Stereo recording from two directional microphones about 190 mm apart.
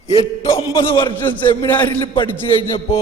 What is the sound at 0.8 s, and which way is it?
Speech, 25° left (ahead or behind).